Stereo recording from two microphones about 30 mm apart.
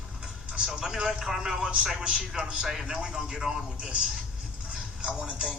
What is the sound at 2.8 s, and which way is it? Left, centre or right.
Speech, right.